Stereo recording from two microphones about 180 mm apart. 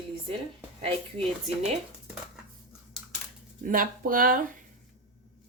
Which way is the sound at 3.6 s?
50° right (ahead or behind).